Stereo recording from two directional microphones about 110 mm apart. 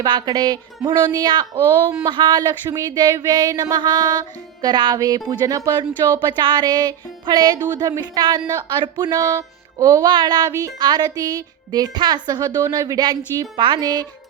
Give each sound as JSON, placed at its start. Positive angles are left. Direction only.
{"t": 0.0, "sound": "music", "side_deg": -35}
{"t": 10.1, "sound": "music", "side_deg": -40}